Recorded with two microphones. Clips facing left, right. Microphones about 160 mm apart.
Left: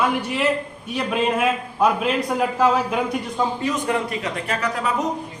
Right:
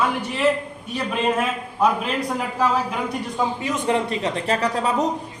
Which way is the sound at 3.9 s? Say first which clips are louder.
Right 2 dB; 30° right (ahead or behind).